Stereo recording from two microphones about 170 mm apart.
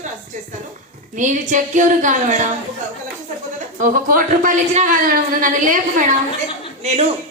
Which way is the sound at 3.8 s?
50° right (ahead or behind).